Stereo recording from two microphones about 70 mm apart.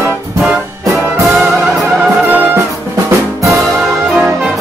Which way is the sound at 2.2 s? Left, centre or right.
Right.